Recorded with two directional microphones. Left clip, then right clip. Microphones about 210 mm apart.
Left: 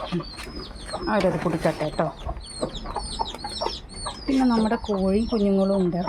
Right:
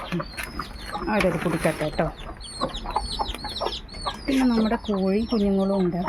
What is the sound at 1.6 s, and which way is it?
Speech, centre (ahead or behind).